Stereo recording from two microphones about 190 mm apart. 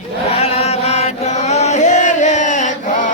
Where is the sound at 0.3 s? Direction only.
30° left (ahead or behind).